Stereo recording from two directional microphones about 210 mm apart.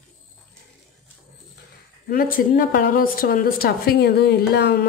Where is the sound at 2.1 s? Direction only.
45° left (ahead or behind).